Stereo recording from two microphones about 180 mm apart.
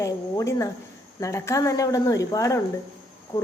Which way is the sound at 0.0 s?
15° left (ahead or behind).